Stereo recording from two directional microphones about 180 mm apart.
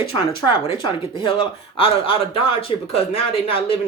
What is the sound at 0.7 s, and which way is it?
Speech, 25° left (ahead or behind).